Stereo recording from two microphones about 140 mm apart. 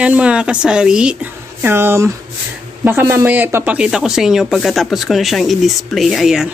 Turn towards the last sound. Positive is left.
turn(degrees=-5)  # may be behind; listen again after turning